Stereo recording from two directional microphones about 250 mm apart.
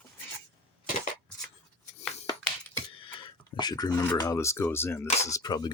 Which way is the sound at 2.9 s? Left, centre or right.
Left.